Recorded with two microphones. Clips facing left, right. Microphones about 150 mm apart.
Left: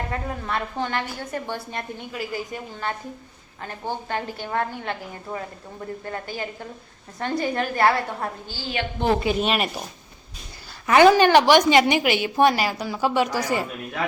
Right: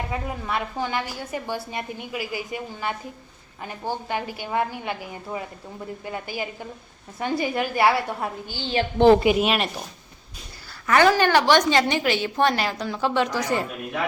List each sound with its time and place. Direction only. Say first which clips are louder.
0.1 s a woman's voice: even; 10° right (ahead or behind)
10.8 s a woman's voice: left 4 dB; 20° left (ahead or behind)